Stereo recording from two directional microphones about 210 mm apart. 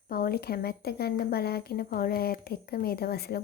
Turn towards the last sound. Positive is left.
turn(degrees=50)  # may be behind; listen again after turning